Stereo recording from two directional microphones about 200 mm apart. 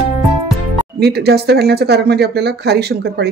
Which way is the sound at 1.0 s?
55° right (ahead or behind).